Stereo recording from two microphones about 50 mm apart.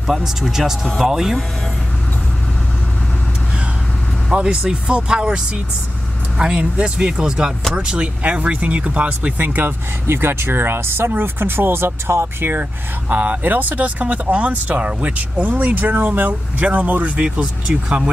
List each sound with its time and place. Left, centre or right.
0.0 s speech: centre
4.3 s speech: centre
9.4 s speech: right
10.0 s speech: right
13.1 s speech: right